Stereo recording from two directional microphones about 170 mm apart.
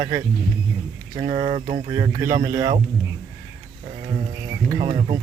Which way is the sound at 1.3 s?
40° right (ahead or behind).